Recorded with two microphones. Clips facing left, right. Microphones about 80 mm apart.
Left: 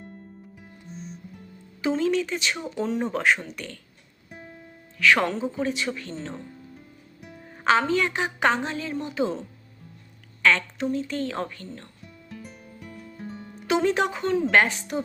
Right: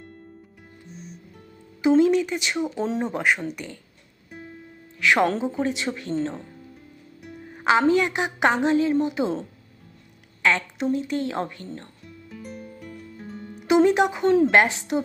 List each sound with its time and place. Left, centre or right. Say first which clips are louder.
1.8 s speech: right 6 dB; centre
2.7 s a woman's voice: right 1 dB; right
3.0 s speech: left 1 dB; centre
4.9 s a woman's voice: right 1 dB; centre
7.5 s a woman's voice: right 3 dB; centre
10.4 s a sound: even; centre
10.9 s a woman's voice: right 3 dB; centre
12.0 s music: right 3 dB; centre
13.6 s a sound: right 5 dB; centre
14.5 s a woman's voice: right 2 dB; right